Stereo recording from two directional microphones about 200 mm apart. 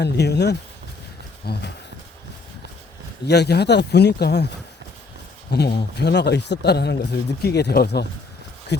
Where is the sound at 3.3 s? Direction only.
55° left (ahead or behind).